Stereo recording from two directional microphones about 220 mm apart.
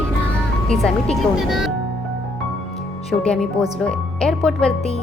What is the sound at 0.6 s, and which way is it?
Speech, centre (ahead or behind).